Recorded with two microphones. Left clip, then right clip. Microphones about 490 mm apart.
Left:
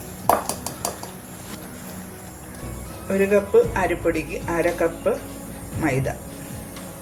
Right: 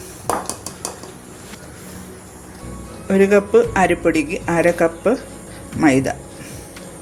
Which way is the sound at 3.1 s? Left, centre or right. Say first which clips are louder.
Right 4 dB; centre.